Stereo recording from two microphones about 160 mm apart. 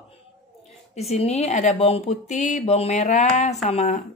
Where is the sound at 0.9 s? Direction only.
40° left (ahead or behind).